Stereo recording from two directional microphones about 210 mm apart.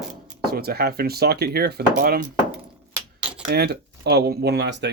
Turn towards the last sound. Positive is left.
turn(degrees=-55)  # may be behind; listen again after turning